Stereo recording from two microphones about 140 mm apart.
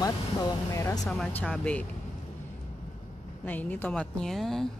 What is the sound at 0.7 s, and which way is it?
Speech, 20° left (ahead or behind).